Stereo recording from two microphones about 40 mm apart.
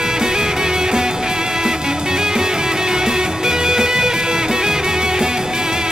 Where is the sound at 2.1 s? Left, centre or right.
Centre.